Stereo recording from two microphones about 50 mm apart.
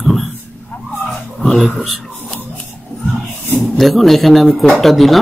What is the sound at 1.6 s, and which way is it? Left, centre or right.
Speech, centre.